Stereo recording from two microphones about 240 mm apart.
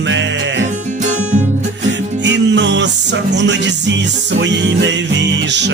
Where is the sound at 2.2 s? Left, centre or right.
Right.